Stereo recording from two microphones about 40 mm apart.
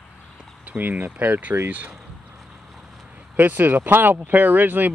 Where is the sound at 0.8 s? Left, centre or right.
Right.